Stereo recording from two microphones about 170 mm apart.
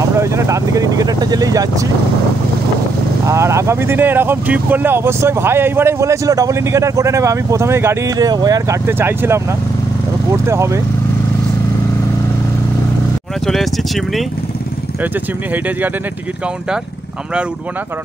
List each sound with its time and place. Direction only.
0.2 s speech: 15° right (ahead or behind)
3.3 s speech: 15° right (ahead or behind)
10.4 s speech: 15° right (ahead or behind)
13.5 s speech: centre (ahead or behind)